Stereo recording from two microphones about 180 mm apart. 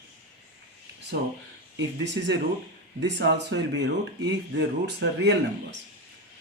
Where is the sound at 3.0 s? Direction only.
75° right (ahead or behind).